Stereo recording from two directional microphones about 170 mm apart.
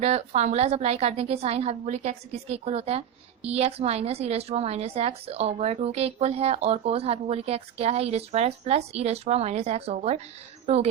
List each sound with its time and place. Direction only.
0.0 s a woman's voice: 40° right (ahead or behind)